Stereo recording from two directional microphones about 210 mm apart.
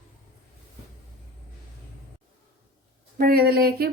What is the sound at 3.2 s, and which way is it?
Speech, 45° right (ahead or behind).